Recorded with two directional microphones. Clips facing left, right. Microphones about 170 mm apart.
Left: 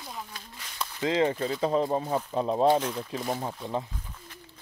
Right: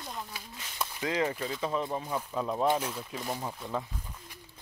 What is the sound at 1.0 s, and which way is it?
Speech, 30° left (ahead or behind).